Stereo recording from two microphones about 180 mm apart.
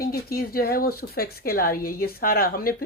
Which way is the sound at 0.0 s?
55° left (ahead or behind).